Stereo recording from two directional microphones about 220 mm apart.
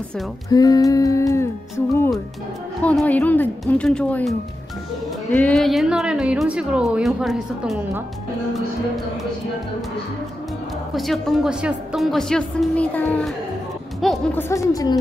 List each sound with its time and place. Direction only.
0.5 s humming: 15° left (ahead or behind)
2.8 s a woman's voice: 5° left (ahead or behind)
11.0 s a woman's voice: centre (ahead or behind); by 15.0 s 15° left (ahead or behind)